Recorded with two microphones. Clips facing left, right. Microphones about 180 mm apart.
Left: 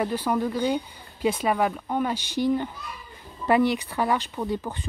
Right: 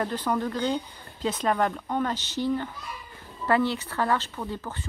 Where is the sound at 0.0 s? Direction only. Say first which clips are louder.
Left 2 dB; 10° left (ahead or behind).